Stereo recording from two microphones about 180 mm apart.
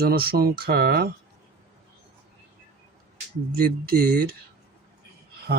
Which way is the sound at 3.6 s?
55° right (ahead or behind).